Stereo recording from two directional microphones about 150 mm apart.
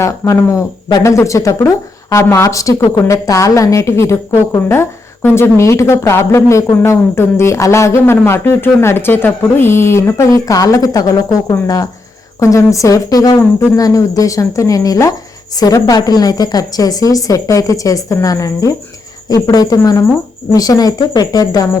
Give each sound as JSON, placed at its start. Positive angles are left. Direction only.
{"t": 0.0, "sound": "a woman's voice", "side_deg": 20}